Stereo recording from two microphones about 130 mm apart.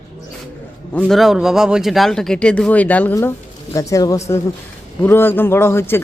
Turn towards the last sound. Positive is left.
turn(degrees=20)  # may be behind; listen again after turning